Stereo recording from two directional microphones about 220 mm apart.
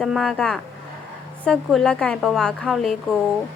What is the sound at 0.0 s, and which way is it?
Speech, centre (ahead or behind).